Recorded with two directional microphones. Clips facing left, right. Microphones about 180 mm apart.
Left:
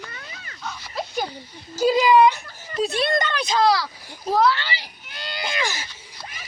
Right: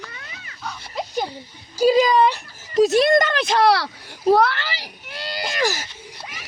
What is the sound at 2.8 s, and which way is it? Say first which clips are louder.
Speech: right 6 dB; 45° right (ahead or behind).